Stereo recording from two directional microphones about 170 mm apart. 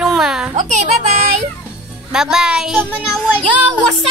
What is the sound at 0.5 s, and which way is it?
Speech, 45° right (ahead or behind).